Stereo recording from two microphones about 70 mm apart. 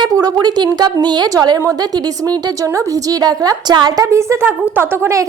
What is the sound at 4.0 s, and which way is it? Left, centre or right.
Speech, right.